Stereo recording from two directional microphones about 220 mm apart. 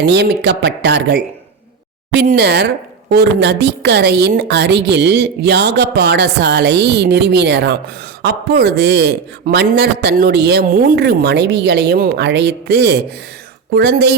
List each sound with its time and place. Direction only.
0.0 s a woman's voice: 50° right (ahead or behind)